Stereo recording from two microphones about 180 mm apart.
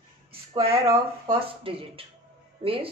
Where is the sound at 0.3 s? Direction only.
30° right (ahead or behind).